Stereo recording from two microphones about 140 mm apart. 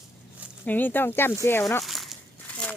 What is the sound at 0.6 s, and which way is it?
Speech, 10° left (ahead or behind).